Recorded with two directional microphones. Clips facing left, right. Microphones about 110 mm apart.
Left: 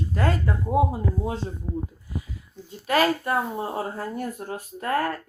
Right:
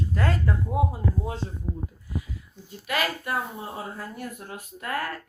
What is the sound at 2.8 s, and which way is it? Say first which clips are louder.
Speech: left 7 dB; 35° left (ahead or behind).